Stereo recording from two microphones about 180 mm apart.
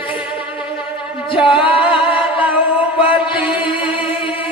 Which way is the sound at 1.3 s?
30° left (ahead or behind).